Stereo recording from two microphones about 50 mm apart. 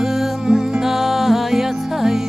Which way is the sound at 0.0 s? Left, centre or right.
Centre.